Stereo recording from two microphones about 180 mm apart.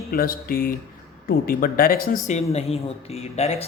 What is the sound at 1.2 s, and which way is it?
Speech, 55° left (ahead or behind).